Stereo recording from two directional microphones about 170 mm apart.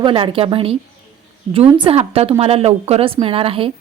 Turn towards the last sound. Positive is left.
turn(degrees=-35)  # may be behind; listen again after turning